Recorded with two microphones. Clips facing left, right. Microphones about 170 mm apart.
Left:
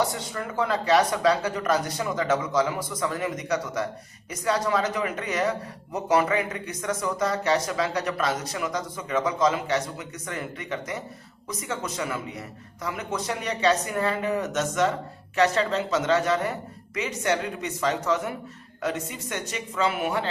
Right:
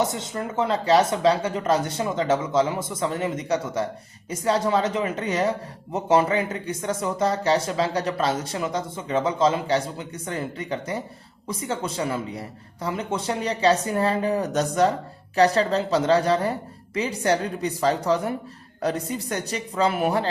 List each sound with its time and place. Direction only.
0.0 s a man's voice: 20° right (ahead or behind)